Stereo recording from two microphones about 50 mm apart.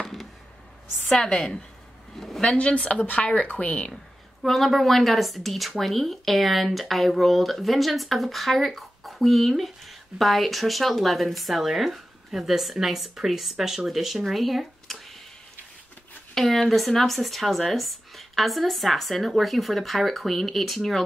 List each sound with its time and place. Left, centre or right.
0.0 s a sound: centre
1.1 s a woman's voice: centre
2.5 s speech: left
3.9 s a woman's voice: centre
16.3 s a woman's voice: centre